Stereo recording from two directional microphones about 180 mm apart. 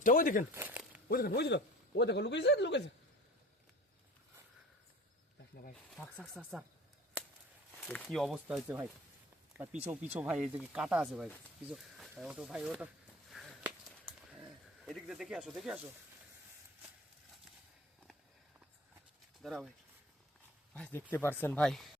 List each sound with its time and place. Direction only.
0.0 s speech: 50° left (ahead or behind)
0.5 s a sound: 10° right (ahead or behind)
1.0 s a man's voice: 55° left (ahead or behind); by 2.9 s 75° left (ahead or behind)
5.9 s speech: centre (ahead or behind)
7.8 s speech: 5° left (ahead or behind)
13.3 s a sound: centre (ahead or behind)
14.3 s speech: 5° right (ahead or behind)
19.4 s speech: centre (ahead or behind)
20.7 s speech: 10° left (ahead or behind)